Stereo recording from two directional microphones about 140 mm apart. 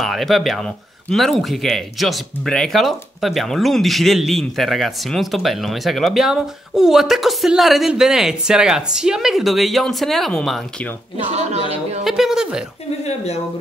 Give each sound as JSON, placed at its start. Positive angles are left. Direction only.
{"t": 0.0, "sound": "speech", "side_deg": 0}
{"t": 11.2, "sound": "speech", "side_deg": -50}
{"t": 12.0, "sound": "speech", "side_deg": 0}
{"t": 13.0, "sound": "speech", "side_deg": 50}